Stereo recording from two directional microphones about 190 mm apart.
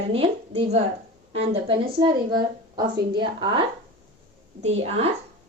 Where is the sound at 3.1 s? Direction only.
25° right (ahead or behind).